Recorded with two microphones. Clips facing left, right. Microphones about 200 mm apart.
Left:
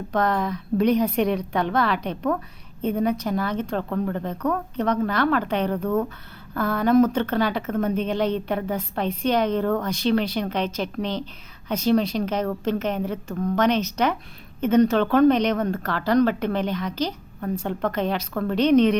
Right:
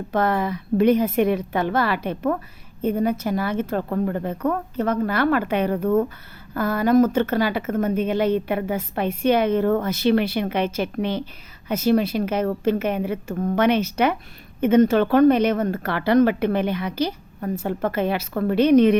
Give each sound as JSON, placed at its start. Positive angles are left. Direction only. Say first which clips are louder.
{"t": 0.1, "sound": "a woman's voice", "louder": "right 1 dB", "side_deg": -5}
{"t": 3.8, "sound": "speech", "louder": "right 2 dB", "side_deg": -20}
{"t": 4.1, "sound": "a woman's voice", "louder": "right 2 dB", "side_deg": -10}